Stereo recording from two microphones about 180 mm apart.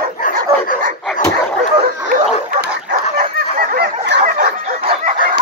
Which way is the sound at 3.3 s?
55° right (ahead or behind).